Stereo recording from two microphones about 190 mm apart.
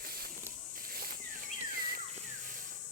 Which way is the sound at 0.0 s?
55° right (ahead or behind).